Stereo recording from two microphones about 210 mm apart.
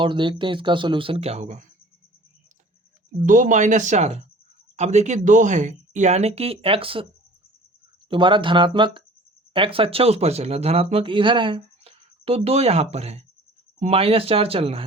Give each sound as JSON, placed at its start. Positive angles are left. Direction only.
{"t": 0.0, "sound": "speech", "side_deg": -25}
{"t": 3.2, "sound": "speech", "side_deg": -40}
{"t": 8.1, "sound": "speech", "side_deg": -25}